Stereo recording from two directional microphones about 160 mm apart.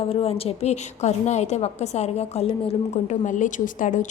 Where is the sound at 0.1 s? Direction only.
40° left (ahead or behind).